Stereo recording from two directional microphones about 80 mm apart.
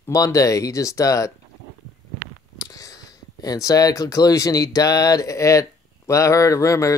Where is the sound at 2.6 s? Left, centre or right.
Left.